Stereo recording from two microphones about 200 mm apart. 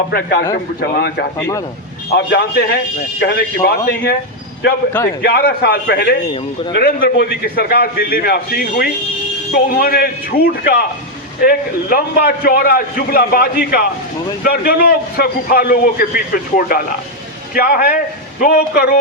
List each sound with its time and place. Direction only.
0.1 s a man's voice: 50° left (ahead or behind)
1.4 s speech: 15° left (ahead or behind)
2.1 s a man's voice: 50° left (ahead or behind)
5.2 s a man's voice: 50° left (ahead or behind)